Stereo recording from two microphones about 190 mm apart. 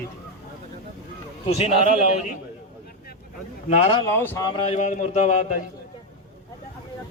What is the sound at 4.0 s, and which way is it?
Speech, 15° left (ahead or behind).